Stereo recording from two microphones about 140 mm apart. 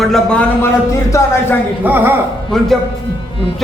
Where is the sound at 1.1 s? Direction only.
20° left (ahead or behind).